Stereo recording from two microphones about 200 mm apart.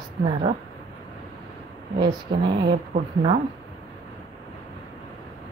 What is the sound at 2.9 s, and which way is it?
Speech, 25° right (ahead or behind).